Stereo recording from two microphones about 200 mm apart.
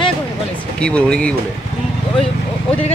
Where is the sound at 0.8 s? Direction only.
5° left (ahead or behind).